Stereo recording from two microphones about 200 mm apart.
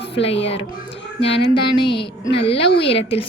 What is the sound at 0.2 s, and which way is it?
Speech, 65° left (ahead or behind).